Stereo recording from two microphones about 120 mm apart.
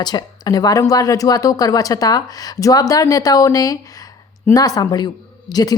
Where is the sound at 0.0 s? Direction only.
35° left (ahead or behind).